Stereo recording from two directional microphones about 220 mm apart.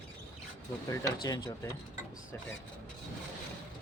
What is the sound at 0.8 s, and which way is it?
Speech, 15° left (ahead or behind).